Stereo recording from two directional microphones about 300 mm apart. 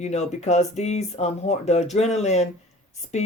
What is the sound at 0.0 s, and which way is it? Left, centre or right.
Speech, left.